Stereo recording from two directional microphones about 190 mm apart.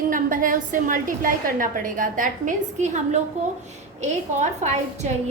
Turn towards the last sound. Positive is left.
turn(degrees=-35)  # may be behind; listen again after turning